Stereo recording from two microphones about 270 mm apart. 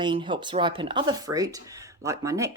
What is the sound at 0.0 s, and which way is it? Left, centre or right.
Speech, centre.